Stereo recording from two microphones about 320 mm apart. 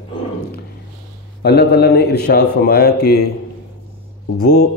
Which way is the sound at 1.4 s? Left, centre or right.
Left.